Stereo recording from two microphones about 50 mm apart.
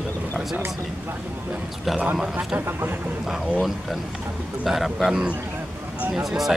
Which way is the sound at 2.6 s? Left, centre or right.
Right.